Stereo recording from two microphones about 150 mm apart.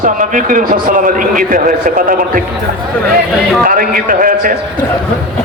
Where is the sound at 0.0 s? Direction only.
65° right (ahead or behind).